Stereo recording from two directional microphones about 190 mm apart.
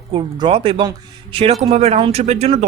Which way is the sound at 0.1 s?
25° right (ahead or behind).